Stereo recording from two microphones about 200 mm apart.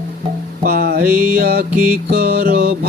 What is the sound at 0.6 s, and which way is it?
Music, 50° right (ahead or behind).